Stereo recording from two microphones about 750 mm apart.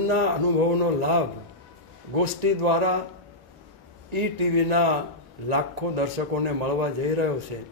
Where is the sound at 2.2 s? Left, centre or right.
Right.